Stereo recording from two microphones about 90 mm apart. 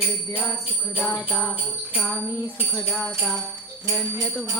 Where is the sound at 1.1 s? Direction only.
25° left (ahead or behind).